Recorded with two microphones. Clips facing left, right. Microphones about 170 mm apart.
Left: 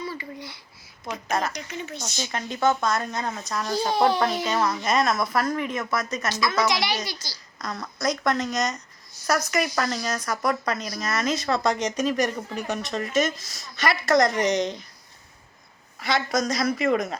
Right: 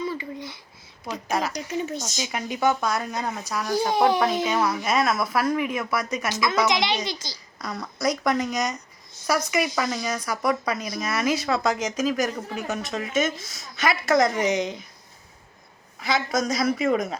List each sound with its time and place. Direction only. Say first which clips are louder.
0.0 s babbling: right 4 dB; 20° right (ahead or behind)
1.1 s a child's voice: even; 10° right (ahead or behind)
1.7 s speech: right 6 dB; 40° right (ahead or behind)
2.1 s a child's voice: right 1 dB; 10° right (ahead or behind)
7.6 s a child's voice: right 1 dB; 10° right (ahead or behind)
16.0 s speech: even; centre (ahead or behind)